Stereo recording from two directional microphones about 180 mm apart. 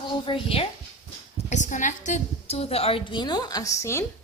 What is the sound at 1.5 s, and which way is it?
A woman's voice, 45° left (ahead or behind).